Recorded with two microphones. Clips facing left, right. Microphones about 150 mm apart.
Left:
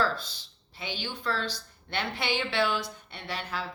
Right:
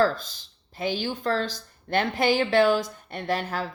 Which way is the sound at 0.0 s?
45° right (ahead or behind).